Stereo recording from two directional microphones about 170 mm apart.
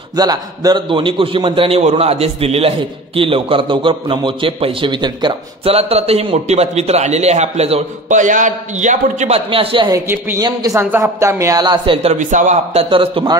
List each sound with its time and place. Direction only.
0.1 s a man's voice: 20° right (ahead or behind); by 9.4 s 45° right (ahead or behind)
9.5 s a man's voice: 30° right (ahead or behind)
9.9 s a woman's voice: 20° right (ahead or behind); by 12.8 s 45° right (ahead or behind)
12.9 s a man's voice: 30° right (ahead or behind)